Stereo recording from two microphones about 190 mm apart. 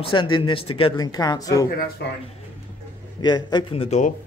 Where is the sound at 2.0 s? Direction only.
65° left (ahead or behind).